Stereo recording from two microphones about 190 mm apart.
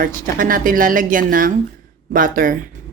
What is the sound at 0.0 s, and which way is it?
Speech, 45° right (ahead or behind).